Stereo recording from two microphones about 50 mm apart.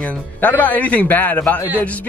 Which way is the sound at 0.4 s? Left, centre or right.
Left.